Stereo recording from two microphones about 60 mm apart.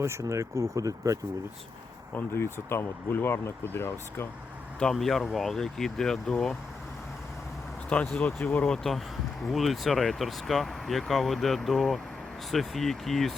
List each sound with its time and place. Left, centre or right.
0.0 s speech: right
2.1 s speech: left
4.8 s speech: centre
7.9 s speech: left
8.7 s speech: centre